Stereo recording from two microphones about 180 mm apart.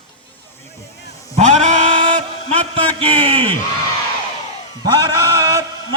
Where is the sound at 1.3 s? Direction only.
40° right (ahead or behind).